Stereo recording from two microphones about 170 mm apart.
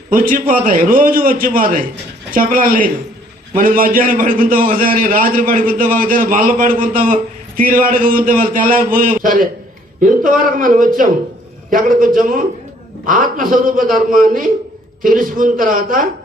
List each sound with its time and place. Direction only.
0.1 s a man's voice: 55° right (ahead or behind)